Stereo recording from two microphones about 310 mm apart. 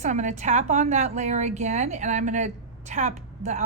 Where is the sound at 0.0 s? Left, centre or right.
Right.